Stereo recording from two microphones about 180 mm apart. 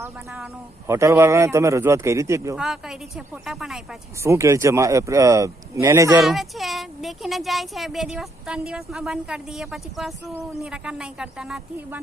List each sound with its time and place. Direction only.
0.9 s a man's voice: 15° right (ahead or behind)
2.6 s speech: 5° right (ahead or behind)
4.2 s a man's voice: 15° right (ahead or behind)
6.2 s speech: centre (ahead or behind)